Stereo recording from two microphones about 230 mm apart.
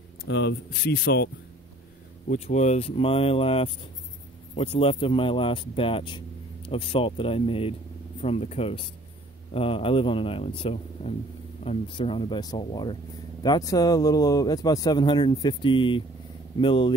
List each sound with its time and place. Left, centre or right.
0.2 s speech: left
2.2 s speech: left